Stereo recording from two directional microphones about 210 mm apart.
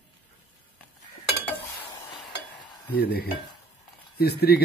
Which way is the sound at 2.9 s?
50° left (ahead or behind).